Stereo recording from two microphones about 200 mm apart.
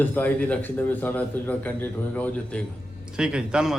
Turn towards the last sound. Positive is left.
turn(degrees=-5)  # may be behind; listen again after turning